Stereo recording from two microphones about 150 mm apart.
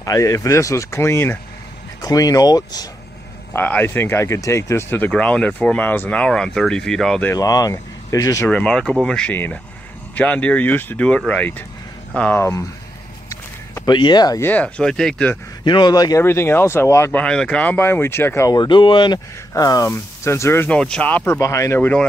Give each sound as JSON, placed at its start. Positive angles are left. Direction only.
{"t": 0.0, "sound": "speech", "side_deg": 20}
{"t": 3.5, "sound": "speech", "side_deg": 15}
{"t": 7.3, "sound": "speech", "side_deg": 25}
{"t": 8.5, "sound": "speech", "side_deg": 5}
{"t": 13.3, "sound": "a sound", "side_deg": 20}
{"t": 13.9, "sound": "speech", "side_deg": 30}
{"t": 14.4, "sound": "speech", "side_deg": 10}
{"t": 15.6, "sound": "speech", "side_deg": 30}
{"t": 18.5, "sound": "speech", "side_deg": 30}